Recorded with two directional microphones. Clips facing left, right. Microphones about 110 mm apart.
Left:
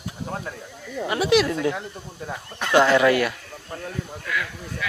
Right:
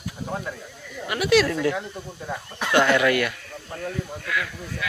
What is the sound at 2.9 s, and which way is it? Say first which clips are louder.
Speech: left 2 dB; 30° left (ahead or behind).